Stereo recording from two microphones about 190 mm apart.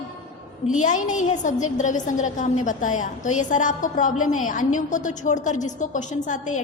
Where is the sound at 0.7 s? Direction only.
40° left (ahead or behind).